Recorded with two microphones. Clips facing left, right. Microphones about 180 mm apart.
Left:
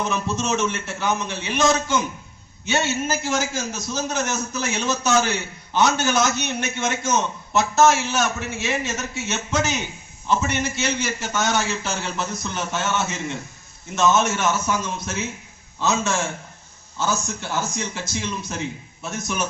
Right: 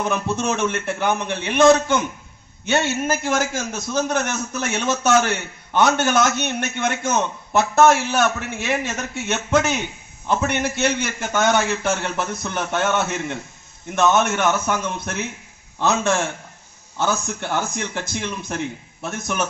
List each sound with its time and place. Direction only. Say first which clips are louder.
0.0 s a man's voice: right 2 dB; 55° right (ahead or behind)